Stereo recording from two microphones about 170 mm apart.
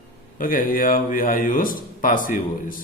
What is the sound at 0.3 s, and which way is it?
Speech, 55° left (ahead or behind).